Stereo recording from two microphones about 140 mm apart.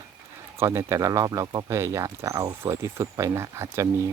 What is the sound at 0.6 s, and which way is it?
Speech, 20° right (ahead or behind).